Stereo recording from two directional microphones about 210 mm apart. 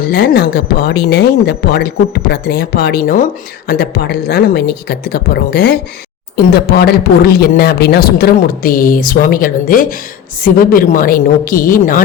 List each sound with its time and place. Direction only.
0.0 s a woman's voice: 50° left (ahead or behind)